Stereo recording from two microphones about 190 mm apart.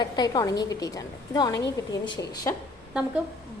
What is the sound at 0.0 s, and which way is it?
A woman's voice, 20° left (ahead or behind).